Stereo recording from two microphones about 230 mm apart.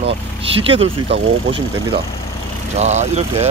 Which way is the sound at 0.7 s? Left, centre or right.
Right.